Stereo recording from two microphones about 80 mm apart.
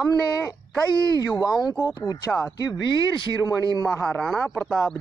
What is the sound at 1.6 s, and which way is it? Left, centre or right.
Speech, left.